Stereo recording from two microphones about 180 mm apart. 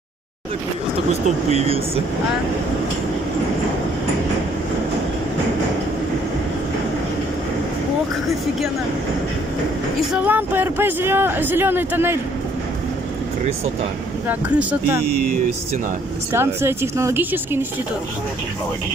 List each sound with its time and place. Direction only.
1.5 s speech: 35° right (ahead or behind)
10.1 s speech: 10° right (ahead or behind)
14.2 s speech: 10° right (ahead or behind)
16.3 s speech: 15° right (ahead or behind)